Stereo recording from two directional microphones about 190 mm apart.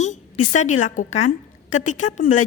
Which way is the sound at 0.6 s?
40° left (ahead or behind).